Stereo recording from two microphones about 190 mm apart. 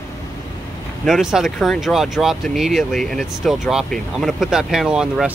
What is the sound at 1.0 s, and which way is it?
Speech, centre (ahead or behind).